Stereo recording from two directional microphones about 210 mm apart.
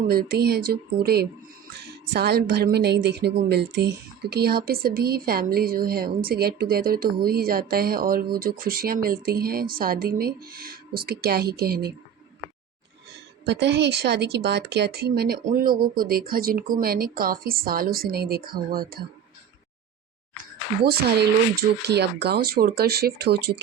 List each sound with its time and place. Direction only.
0.1 s speech: 45° right (ahead or behind)
13.4 s speech: 55° right (ahead or behind)
20.9 s speech: 50° right (ahead or behind)